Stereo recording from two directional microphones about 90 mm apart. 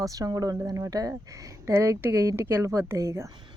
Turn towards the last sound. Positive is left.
turn(degrees=-30)  # may be behind; listen again after turning